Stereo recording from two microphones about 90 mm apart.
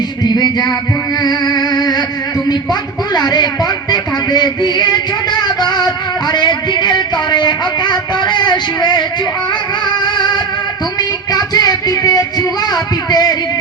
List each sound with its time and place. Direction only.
0.3 s music: 50° left (ahead or behind)
3.2 s speech: 50° left (ahead or behind)
6.3 s a sound: 50° left (ahead or behind)
10.0 s music: 55° left (ahead or behind)
11.3 s music: 45° left (ahead or behind)